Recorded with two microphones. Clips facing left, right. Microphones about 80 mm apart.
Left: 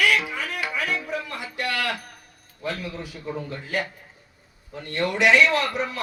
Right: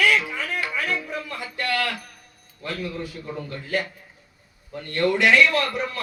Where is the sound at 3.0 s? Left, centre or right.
Centre.